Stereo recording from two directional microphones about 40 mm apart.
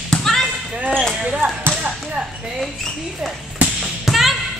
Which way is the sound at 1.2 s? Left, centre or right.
Right.